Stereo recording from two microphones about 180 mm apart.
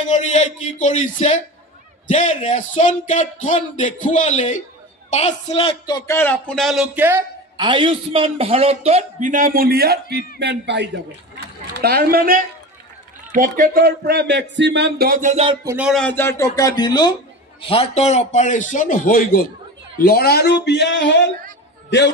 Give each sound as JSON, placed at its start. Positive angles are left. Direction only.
{"t": 0.0, "sound": "speech", "side_deg": 40}
{"t": 7.5, "sound": "a man's voice", "side_deg": -25}
{"t": 10.4, "sound": "a man's voice", "side_deg": -70}
{"t": 11.7, "sound": "speech", "side_deg": -60}
{"t": 15.2, "sound": "a man's voice", "side_deg": -35}
{"t": 15.6, "sound": "speech", "side_deg": -10}
{"t": 15.9, "sound": "a woman's voice", "side_deg": 5}
{"t": 20.6, "sound": "a sound", "side_deg": 70}